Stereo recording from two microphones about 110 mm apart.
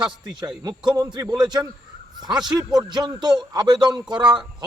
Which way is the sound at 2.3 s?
5° right (ahead or behind).